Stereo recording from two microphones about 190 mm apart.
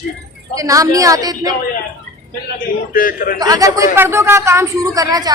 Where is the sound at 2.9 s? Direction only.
45° left (ahead or behind).